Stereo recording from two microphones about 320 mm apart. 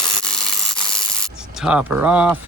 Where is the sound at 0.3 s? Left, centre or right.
Centre.